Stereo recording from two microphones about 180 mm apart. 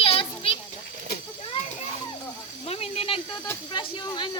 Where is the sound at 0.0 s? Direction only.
30° left (ahead or behind).